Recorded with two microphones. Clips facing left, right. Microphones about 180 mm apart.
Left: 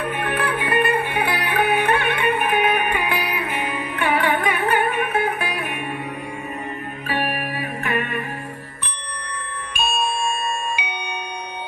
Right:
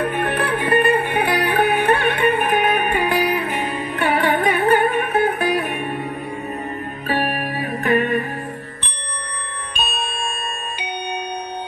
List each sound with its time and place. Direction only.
0.1 s music: 35° right (ahead or behind)
7.1 s music: 40° right (ahead or behind)
10.4 s music: 40° right (ahead or behind)